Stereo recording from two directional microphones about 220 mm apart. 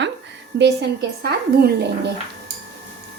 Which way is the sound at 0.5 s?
45° right (ahead or behind).